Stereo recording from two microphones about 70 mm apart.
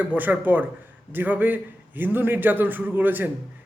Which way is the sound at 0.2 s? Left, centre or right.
Right.